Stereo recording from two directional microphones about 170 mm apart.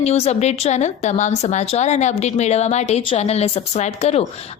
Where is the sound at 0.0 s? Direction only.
40° left (ahead or behind).